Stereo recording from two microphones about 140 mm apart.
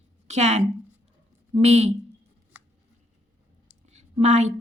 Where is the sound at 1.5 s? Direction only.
50° right (ahead or behind).